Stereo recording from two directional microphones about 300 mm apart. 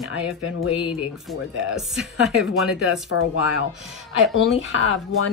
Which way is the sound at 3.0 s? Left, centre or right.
Left.